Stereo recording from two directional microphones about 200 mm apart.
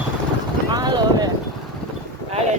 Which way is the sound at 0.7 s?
20° right (ahead or behind).